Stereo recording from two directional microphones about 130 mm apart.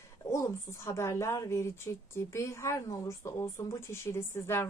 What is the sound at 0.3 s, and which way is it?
A woman's voice, 25° left (ahead or behind).